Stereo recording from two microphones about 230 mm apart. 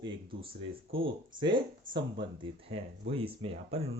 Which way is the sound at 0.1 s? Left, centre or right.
Right.